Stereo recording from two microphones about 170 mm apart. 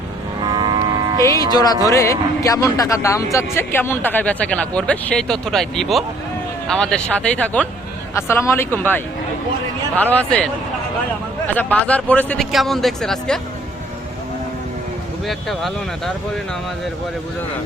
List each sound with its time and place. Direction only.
0.4 s music: 25° right (ahead or behind)
1.2 s speech: 20° left (ahead or behind); by 13.4 s 5° left (ahead or behind)
15.3 s speech: centre (ahead or behind)